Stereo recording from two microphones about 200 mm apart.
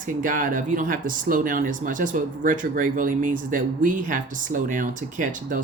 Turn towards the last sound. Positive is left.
turn(degrees=-40)  # may be behind; listen again after turning